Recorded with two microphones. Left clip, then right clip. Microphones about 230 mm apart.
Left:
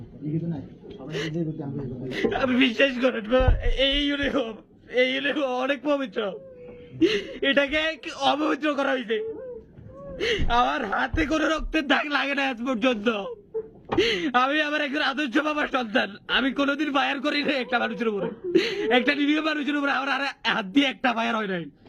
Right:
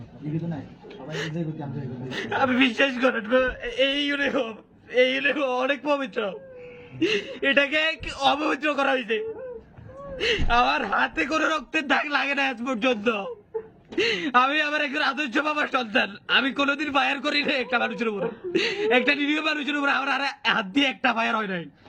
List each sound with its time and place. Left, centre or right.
1.0 s a man's voice: centre